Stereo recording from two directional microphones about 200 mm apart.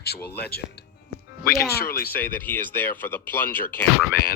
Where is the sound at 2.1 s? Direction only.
10° left (ahead or behind).